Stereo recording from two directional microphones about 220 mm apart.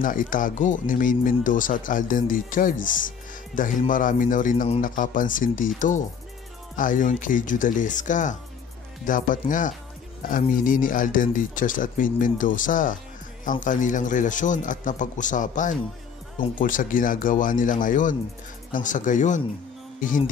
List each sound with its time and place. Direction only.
0.0 s speech: 35° left (ahead or behind)